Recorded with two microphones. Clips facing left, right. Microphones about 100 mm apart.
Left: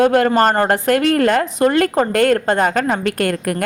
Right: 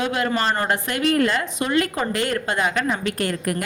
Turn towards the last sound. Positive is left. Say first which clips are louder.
# left 5 dB
turn(degrees=55)  # may be behind; listen again after turning